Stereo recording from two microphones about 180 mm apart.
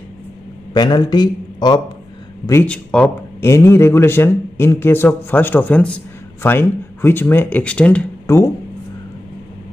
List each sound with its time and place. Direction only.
0.7 s a man's voice: 25° left (ahead or behind)
2.4 s speech: 10° left (ahead or behind)